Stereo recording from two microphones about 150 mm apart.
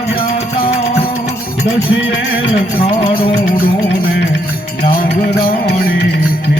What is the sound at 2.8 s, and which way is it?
Music, 40° left (ahead or behind).